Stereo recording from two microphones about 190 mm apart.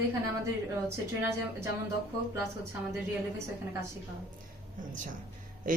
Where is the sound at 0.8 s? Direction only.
15° right (ahead or behind).